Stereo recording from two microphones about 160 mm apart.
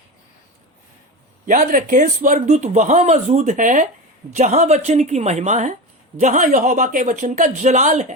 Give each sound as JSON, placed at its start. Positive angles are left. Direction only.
{"t": 1.5, "sound": "speech", "side_deg": -55}